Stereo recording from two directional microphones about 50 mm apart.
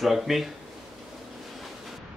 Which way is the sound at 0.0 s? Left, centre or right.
Centre.